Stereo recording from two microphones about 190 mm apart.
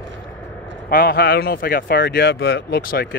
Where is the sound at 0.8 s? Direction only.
55° left (ahead or behind).